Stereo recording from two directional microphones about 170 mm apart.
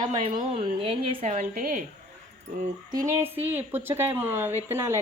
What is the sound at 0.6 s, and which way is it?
A woman's voice, 30° right (ahead or behind).